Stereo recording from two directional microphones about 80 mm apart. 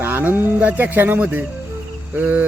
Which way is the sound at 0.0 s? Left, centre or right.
Right.